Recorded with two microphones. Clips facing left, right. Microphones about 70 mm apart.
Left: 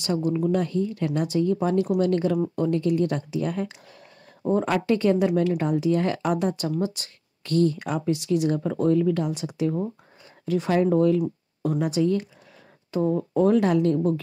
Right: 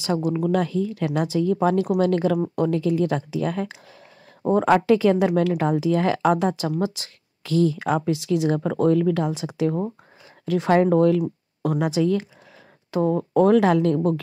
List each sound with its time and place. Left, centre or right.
0.1 s a woman's voice: right
2.5 s a woman's voice: right
4.4 s speech: right
4.8 s a woman's voice: right
8.7 s a woman's voice: right
10.7 s speech: right
12.9 s speech: right